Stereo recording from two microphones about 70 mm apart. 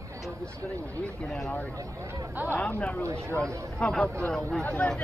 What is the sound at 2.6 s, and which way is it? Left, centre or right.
Speech, centre.